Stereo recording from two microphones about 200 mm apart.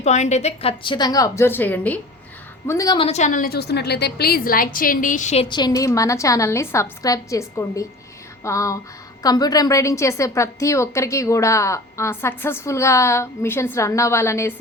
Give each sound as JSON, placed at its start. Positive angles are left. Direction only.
{"t": 0.0, "sound": "a woman's voice", "side_deg": 35}
{"t": 3.1, "sound": "a woman's voice", "side_deg": 35}